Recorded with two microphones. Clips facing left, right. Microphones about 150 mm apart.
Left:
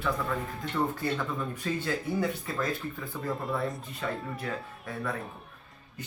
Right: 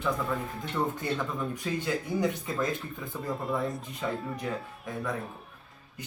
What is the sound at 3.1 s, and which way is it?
Speech, centre (ahead or behind).